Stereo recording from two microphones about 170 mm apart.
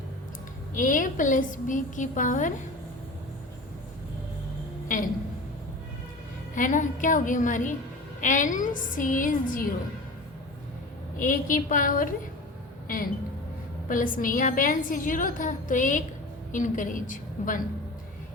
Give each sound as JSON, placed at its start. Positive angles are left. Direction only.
{"t": 0.7, "sound": "a woman's voice", "side_deg": 50}
{"t": 4.9, "sound": "a sound", "side_deg": 50}
{"t": 6.5, "sound": "a woman's voice", "side_deg": 50}
{"t": 11.2, "sound": "a woman's voice", "side_deg": 50}
{"t": 13.8, "sound": "a woman's voice", "side_deg": 55}